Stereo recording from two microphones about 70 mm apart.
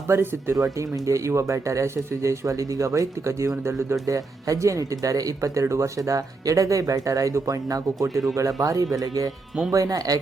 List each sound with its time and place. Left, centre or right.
0.1 s speech: right
0.5 s speech: right
4.0 s speech: right